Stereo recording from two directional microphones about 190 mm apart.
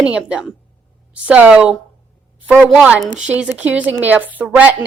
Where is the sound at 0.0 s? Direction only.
5° right (ahead or behind).